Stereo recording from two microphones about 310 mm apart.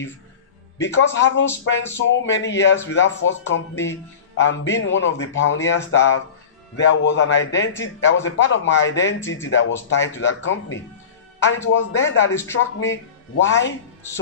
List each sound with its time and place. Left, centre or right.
0.7 s speech: left